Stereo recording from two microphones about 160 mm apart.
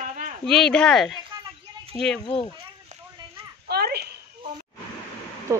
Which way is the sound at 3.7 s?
85° right.